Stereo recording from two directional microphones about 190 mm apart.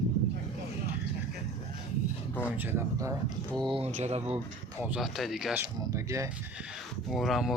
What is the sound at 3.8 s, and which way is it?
Speech, 35° right (ahead or behind).